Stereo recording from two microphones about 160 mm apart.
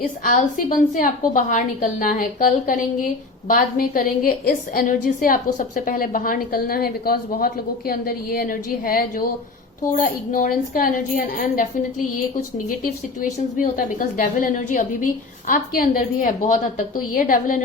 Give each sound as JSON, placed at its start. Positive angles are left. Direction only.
{"t": 0.3, "sound": "a woman's voice", "side_deg": 60}
{"t": 13.6, "sound": "a woman's voice", "side_deg": 55}